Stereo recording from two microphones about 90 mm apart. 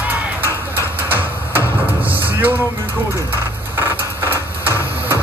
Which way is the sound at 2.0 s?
20° right (ahead or behind).